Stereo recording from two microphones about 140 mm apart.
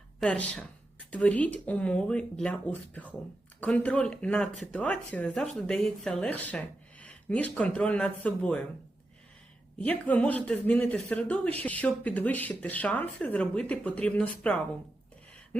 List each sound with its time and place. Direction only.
0.2 s speech: 10° left (ahead or behind)
9.8 s speech: 10° left (ahead or behind)